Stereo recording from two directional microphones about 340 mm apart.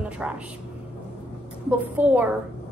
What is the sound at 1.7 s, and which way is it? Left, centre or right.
Speech, centre.